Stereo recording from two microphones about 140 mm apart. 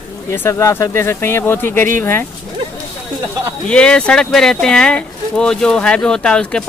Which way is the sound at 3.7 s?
5° left (ahead or behind).